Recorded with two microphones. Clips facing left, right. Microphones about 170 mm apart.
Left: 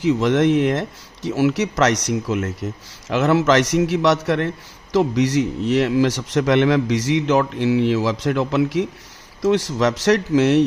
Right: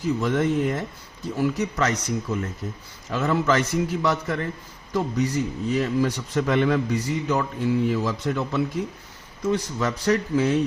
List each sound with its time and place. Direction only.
0.0 s a man's voice: 90° left